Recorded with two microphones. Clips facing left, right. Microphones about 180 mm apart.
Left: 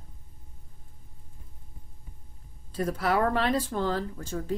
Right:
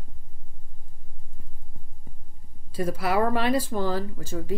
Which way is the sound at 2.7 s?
5° right (ahead or behind).